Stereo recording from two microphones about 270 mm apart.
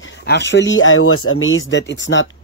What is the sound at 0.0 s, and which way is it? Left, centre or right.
Speech, left.